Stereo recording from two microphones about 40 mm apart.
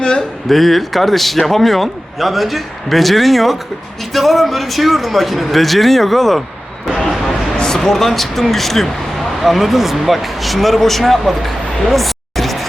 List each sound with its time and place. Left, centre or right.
0.0 s speech: left
0.4 s a man's voice: centre
7.8 s speech: centre